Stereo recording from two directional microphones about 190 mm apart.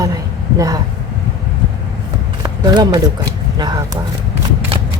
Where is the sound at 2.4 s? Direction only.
20° right (ahead or behind).